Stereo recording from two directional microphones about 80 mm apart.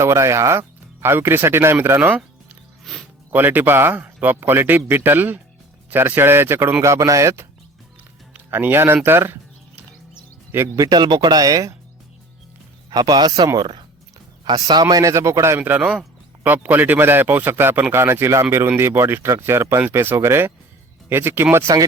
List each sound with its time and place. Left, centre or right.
0.0 s speech: right
2.9 s music: centre
3.3 s speech: right
6.8 s speech: right
8.4 s speech: right
9.0 s music: right
10.8 s a man's voice: right
12.9 s a man's voice: right
15.6 s speech: right
21.7 s a man's voice: right